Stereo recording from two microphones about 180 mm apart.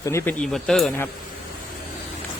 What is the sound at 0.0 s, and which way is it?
Speech, 15° left (ahead or behind).